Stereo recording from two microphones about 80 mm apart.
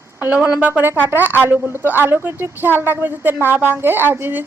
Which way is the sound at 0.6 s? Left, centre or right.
Right.